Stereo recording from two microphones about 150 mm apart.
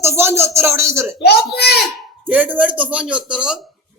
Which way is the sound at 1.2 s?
90° left.